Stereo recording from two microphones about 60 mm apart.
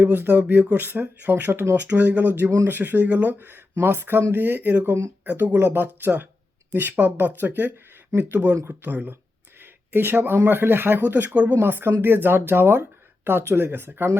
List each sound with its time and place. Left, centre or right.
0.0 s speech: right
11.6 s speech: right